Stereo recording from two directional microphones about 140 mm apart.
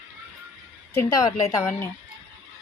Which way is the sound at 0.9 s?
25° left (ahead or behind).